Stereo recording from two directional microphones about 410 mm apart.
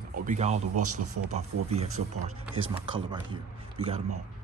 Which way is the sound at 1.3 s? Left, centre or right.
Centre.